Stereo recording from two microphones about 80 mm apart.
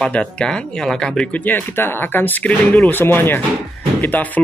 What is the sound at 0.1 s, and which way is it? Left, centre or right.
Speech, centre.